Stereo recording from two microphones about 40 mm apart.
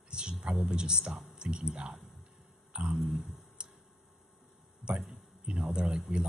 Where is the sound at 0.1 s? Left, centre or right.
Right.